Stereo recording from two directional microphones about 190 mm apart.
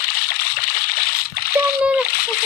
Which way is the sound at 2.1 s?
50° left (ahead or behind).